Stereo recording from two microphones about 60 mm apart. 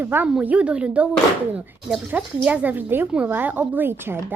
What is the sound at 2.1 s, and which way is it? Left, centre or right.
Speech, right.